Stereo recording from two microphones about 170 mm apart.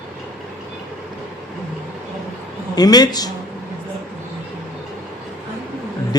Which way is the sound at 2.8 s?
25° left (ahead or behind).